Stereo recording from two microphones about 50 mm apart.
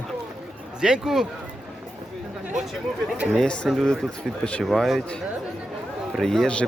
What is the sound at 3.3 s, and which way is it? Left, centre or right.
Speech, centre.